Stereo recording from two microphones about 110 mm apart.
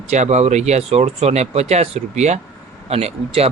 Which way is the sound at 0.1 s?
90° right.